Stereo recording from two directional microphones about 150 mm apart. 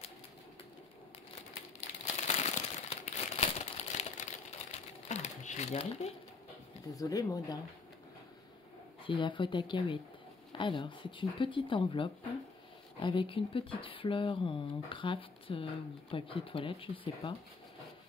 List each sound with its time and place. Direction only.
2.2 s crumpling: 50° left (ahead or behind)
6.9 s speech: 25° left (ahead or behind)
9.0 s speech: 35° left (ahead or behind)